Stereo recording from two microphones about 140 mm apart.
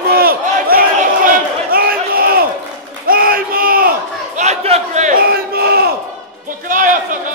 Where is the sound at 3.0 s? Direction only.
90° right.